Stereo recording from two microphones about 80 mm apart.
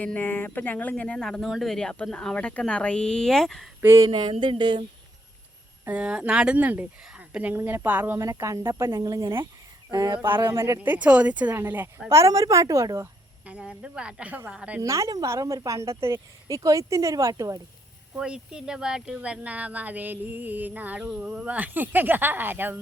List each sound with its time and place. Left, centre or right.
0.0 s speech: left; by 3.7 s centre
3.8 s speech: right
4.1 s a sound: right
5.9 s speech: centre
7.5 s speech: right
8.2 s a woman's voice: right
8.9 s speech: right
10.2 s a woman's voice: right
10.8 s a woman's voice: centre; by 13.1 s right
13.4 s speech: centre
14.8 s a woman's voice: right
16.6 s speech: right
18.2 s speech: centre; by 22.8 s right